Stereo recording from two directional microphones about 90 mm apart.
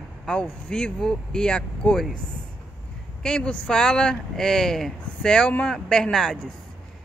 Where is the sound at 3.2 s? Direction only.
10° left (ahead or behind).